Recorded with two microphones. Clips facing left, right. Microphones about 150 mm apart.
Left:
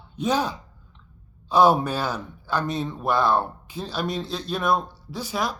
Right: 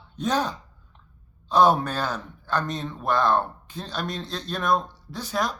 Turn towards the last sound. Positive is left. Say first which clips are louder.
# even
turn(degrees=5)  # may be behind; listen again after turning